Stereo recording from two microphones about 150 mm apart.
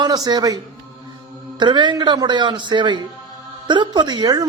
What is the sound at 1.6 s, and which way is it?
Speech, 30° right (ahead or behind).